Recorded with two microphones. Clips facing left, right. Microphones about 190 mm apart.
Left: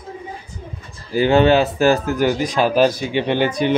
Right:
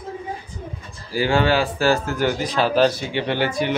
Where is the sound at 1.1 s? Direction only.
20° left (ahead or behind).